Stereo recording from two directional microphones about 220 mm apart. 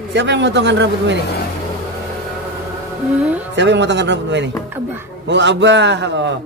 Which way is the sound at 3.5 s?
55° right (ahead or behind).